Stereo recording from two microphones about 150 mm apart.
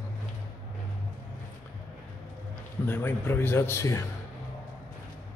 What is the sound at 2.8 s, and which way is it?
A man's voice, 15° left (ahead or behind).